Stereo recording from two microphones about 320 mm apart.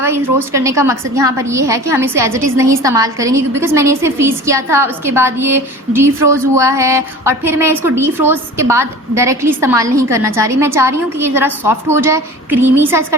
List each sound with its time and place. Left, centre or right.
0.0 s a woman's voice: centre